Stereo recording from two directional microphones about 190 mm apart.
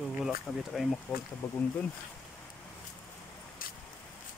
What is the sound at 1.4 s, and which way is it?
Speech, 15° left (ahead or behind).